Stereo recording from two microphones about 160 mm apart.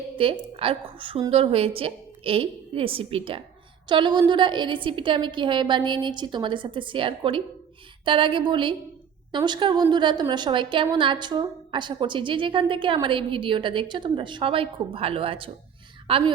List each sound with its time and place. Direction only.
0.2 s a woman's voice: 35° right (ahead or behind)